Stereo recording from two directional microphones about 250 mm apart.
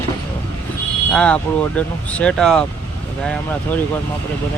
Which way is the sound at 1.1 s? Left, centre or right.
Centre.